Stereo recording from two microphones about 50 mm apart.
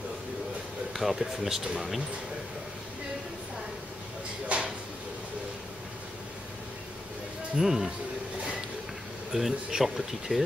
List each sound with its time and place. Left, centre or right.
0.9 s speech: centre
4.5 s a sound: right
7.5 s speech: centre
9.3 s speech: centre